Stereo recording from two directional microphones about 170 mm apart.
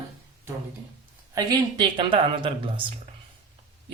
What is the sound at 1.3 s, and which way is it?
A woman's voice, 25° right (ahead or behind).